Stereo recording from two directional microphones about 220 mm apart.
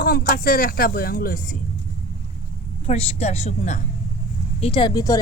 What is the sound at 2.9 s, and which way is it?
Speech, 30° left (ahead or behind).